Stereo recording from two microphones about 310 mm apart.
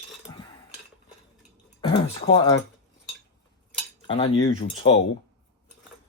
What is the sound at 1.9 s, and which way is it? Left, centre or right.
Speech, centre.